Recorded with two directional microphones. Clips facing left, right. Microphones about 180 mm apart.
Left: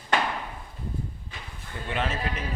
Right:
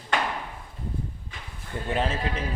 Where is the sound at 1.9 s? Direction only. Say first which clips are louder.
Right 2 dB; 30° right (ahead or behind).